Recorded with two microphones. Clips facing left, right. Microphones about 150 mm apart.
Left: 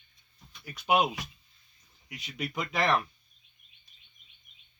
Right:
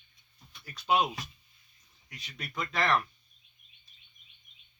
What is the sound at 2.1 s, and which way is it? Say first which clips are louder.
Speech: left 8 dB; 15° left (ahead or behind).